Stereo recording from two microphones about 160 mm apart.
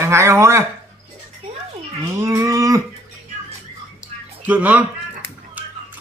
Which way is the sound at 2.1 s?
20° right (ahead or behind).